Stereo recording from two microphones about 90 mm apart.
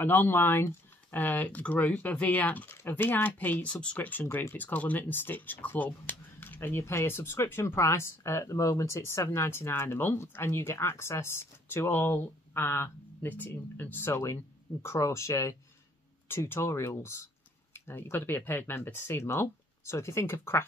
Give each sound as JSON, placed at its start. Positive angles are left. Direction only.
{"t": 0.0, "sound": "speech", "side_deg": 25}